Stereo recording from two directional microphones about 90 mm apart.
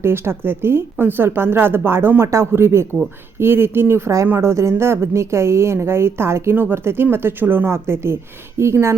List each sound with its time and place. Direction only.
0.0 s a woman's voice: 25° right (ahead or behind)